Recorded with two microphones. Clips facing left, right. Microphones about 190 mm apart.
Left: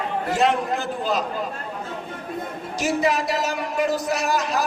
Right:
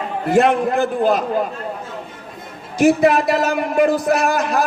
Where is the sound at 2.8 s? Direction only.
55° right (ahead or behind).